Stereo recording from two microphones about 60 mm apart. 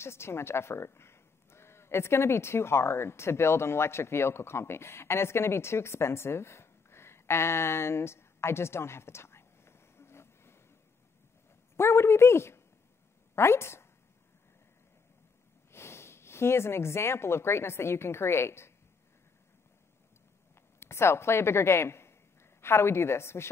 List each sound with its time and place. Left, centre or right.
0.0 s speech: left
11.7 s a woman's voice: left
15.7 s speech: left
20.8 s a woman's voice: left